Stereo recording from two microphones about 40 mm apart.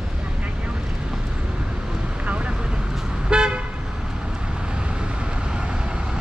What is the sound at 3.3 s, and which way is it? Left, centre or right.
Toot, right.